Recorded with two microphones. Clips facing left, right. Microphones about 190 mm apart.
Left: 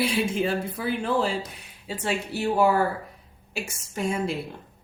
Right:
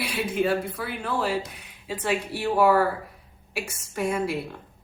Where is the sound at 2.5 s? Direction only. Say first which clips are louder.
Right 2 dB; 25° left (ahead or behind).